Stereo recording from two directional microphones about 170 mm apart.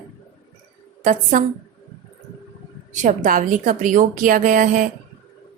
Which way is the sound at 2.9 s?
45° right (ahead or behind).